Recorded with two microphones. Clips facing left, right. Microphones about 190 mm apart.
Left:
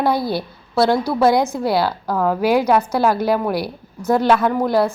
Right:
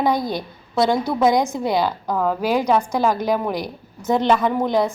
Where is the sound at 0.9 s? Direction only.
15° right (ahead or behind).